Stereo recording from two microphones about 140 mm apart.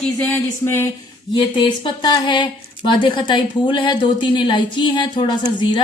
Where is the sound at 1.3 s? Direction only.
35° left (ahead or behind).